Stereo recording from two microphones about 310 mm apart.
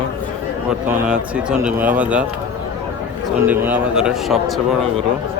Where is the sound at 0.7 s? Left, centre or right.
Centre.